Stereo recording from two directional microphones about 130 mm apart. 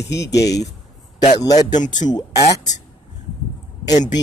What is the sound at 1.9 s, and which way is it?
Speech, 30° left (ahead or behind).